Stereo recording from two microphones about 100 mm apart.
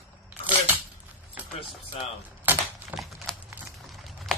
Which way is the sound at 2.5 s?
20° right (ahead or behind).